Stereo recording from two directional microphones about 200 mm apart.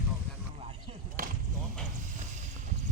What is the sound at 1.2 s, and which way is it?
Basketball bounce, 45° right (ahead or behind).